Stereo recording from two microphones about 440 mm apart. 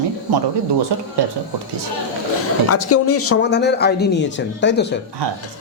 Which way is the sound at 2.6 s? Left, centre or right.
Left.